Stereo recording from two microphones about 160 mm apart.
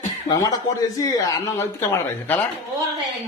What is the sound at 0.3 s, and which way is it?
Speech, 25° left (ahead or behind).